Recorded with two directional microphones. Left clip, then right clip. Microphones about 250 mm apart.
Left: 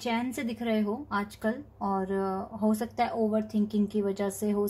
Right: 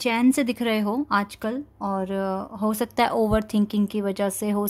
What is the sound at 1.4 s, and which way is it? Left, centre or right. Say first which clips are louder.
Speech: right 3 dB; right.